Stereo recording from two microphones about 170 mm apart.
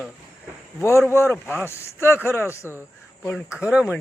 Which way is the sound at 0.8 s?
15° left (ahead or behind).